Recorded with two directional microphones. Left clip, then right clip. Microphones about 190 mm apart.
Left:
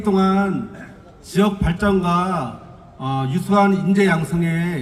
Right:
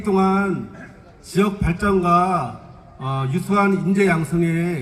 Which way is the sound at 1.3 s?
40° right (ahead or behind).